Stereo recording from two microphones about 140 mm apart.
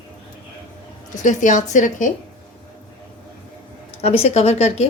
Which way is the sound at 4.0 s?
45° left (ahead or behind).